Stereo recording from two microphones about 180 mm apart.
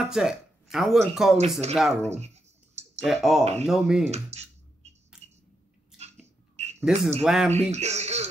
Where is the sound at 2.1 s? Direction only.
40° right (ahead or behind).